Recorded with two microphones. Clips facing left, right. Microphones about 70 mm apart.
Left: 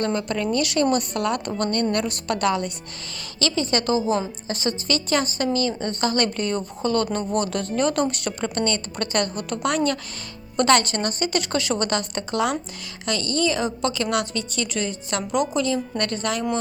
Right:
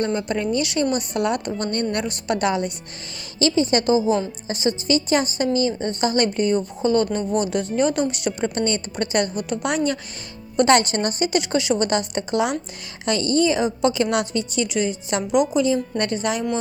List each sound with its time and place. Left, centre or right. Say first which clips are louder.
0.0 s a woman's voice: right 1 dB; centre